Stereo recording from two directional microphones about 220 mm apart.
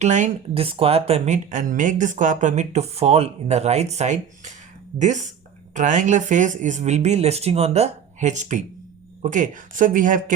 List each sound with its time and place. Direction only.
0.0 s speech: 30° right (ahead or behind)